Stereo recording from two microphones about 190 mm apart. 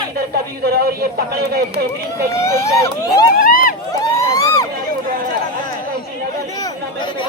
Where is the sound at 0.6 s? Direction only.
55° right (ahead or behind).